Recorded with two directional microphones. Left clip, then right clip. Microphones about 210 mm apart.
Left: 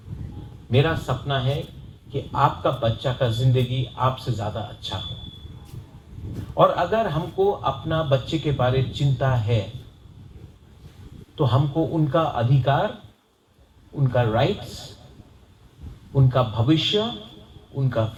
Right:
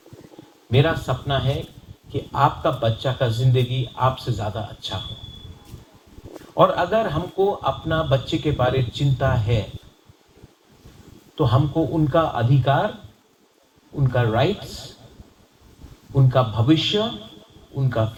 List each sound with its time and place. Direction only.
0.7 s speech: 45° right (ahead or behind)
6.6 s speech: 45° right (ahead or behind)
11.3 s speech: 45° right (ahead or behind)
14.0 s speech: 50° right (ahead or behind)
16.1 s speech: 50° right (ahead or behind)